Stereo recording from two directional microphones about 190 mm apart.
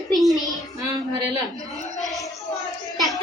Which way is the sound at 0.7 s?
20° right (ahead or behind).